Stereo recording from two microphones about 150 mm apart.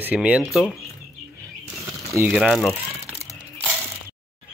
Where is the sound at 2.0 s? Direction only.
20° right (ahead or behind).